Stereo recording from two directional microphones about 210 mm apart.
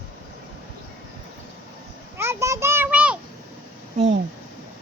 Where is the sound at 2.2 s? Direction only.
15° right (ahead or behind).